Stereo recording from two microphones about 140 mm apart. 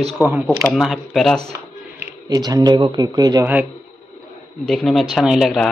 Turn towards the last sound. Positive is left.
turn(degrees=0)  # may be behind; listen again after turning